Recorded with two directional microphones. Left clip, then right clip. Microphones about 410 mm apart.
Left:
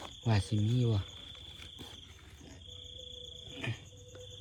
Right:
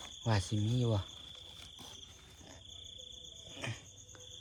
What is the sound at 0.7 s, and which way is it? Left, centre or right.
Speech, centre.